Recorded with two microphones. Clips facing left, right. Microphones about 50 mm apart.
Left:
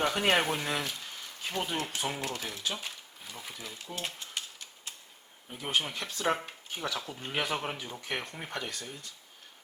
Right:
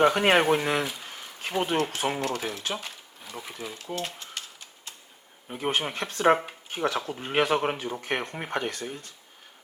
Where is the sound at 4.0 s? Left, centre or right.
Centre.